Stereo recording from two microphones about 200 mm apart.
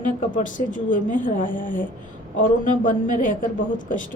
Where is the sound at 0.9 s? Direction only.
40° left (ahead or behind).